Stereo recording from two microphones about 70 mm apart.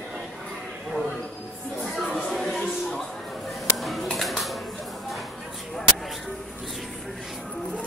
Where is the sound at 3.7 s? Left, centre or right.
Centre.